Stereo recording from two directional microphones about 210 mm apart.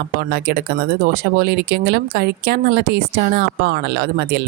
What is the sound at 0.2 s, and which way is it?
Speech, 45° right (ahead or behind).